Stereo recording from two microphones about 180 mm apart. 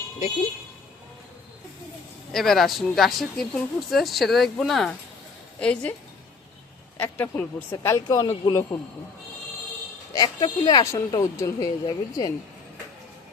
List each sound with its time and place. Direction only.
2.3 s speech: centre (ahead or behind)
6.9 s speech: 10° left (ahead or behind)
10.1 s speech: 20° left (ahead or behind)